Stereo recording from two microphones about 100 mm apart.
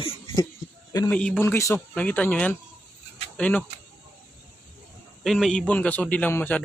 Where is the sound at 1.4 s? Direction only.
25° left (ahead or behind).